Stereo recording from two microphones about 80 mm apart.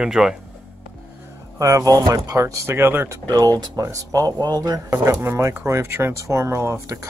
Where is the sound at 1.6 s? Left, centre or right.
Right.